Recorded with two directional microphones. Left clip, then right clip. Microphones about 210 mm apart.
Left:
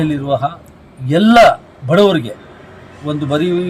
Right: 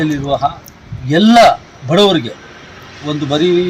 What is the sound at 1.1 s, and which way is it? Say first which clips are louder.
A man's voice: even; 25° left (ahead or behind).